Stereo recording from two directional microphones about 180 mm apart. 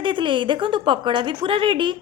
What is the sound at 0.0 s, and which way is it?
A woman's voice, 25° right (ahead or behind).